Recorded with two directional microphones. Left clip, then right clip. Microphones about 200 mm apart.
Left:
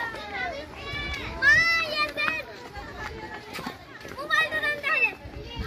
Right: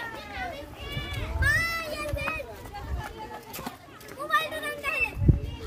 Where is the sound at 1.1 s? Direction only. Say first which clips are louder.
Left 6 dB; 65° right (ahead or behind).